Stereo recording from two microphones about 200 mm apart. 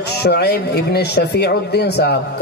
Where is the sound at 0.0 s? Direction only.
55° left (ahead or behind).